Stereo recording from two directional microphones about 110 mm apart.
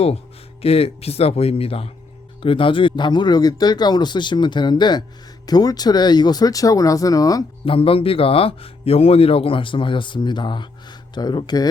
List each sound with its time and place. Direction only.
0.6 s a man's voice: 65° left (ahead or behind); by 7.4 s 30° left (ahead or behind)
7.6 s speech: 55° left (ahead or behind); by 11.7 s 40° left (ahead or behind)